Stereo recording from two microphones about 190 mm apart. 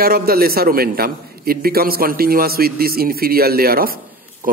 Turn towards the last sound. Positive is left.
turn(degrees=-50)  # may be behind; listen again after turning